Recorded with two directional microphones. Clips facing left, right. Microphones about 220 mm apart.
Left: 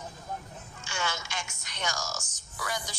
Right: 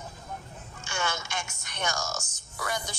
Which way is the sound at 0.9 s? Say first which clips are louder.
Right 2 dB; 55° right (ahead or behind).